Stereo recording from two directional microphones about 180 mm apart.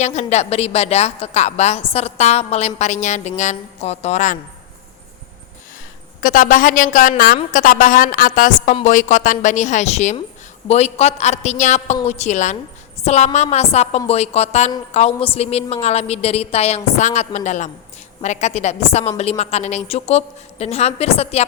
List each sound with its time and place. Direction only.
0.0 s a woman's voice: 40° left (ahead or behind)
6.1 s a woman's voice: 50° left (ahead or behind)